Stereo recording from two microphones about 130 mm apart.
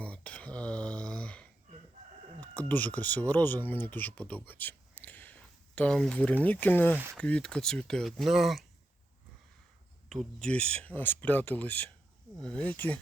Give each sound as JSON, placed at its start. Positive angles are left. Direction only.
{"t": 0.0, "sound": "a sound", "side_deg": 10}
{"t": 2.4, "sound": "speech", "side_deg": 10}
{"t": 6.9, "sound": "speech", "side_deg": -15}
{"t": 7.2, "sound": "speech", "side_deg": 10}
{"t": 10.1, "sound": "speech", "side_deg": 5}